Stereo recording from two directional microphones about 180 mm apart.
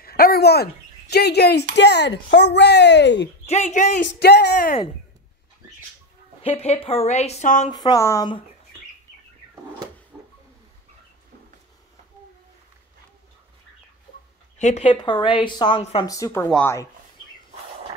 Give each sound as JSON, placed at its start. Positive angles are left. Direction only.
{"t": 0.0, "sound": "bird", "side_deg": 55}
{"t": 1.1, "sound": "speech", "side_deg": 65}
{"t": 3.4, "sound": "a woman's voice", "side_deg": 40}
{"t": 4.0, "sound": "speech", "side_deg": 70}
{"t": 6.4, "sound": "a woman's voice", "side_deg": 35}
{"t": 7.7, "sound": "a woman's voice", "side_deg": 20}
{"t": 10.1, "sound": "a sound", "side_deg": -5}
{"t": 14.6, "sound": "a woman's voice", "side_deg": 40}
{"t": 15.0, "sound": "a woman's voice", "side_deg": 25}
{"t": 16.1, "sound": "speech", "side_deg": 15}